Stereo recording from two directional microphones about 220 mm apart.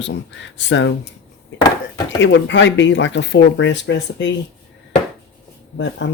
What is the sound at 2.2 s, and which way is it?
Speech, 55° left (ahead or behind).